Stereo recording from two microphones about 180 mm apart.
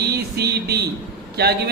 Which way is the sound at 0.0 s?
60° right (ahead or behind).